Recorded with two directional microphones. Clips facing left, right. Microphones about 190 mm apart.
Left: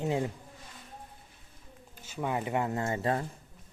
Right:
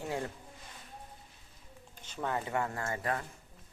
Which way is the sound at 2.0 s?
10° left (ahead or behind).